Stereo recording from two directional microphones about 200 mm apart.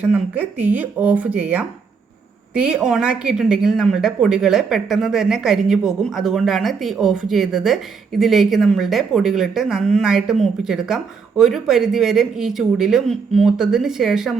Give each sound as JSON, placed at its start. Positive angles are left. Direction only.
{"t": 0.0, "sound": "a woman's voice", "side_deg": -5}